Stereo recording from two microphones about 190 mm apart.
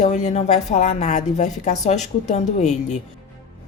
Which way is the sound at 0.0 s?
40° left (ahead or behind).